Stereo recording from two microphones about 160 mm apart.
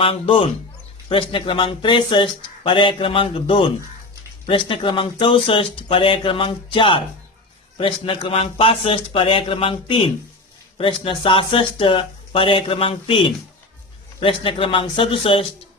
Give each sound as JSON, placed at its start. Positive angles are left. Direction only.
{"t": 0.0, "sound": "speech", "side_deg": 35}